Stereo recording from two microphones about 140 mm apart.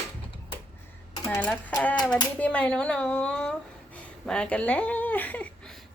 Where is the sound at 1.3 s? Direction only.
10° left (ahead or behind).